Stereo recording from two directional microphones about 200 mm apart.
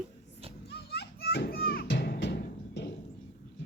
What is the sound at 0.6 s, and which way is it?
Children playing, 55° left (ahead or behind).